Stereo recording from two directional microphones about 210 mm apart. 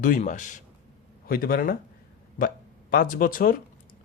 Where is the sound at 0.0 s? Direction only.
40° left (ahead or behind).